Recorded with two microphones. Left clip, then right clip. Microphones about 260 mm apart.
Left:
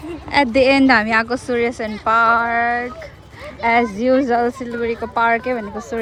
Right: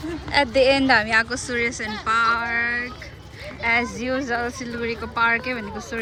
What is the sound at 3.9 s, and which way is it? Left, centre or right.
Speech, centre.